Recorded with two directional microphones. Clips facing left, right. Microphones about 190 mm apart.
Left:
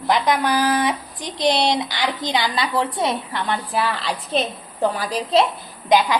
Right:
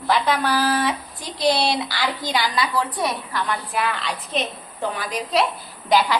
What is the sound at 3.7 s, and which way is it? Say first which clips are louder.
A woman's voice: left 2 dB; 35° left (ahead or behind).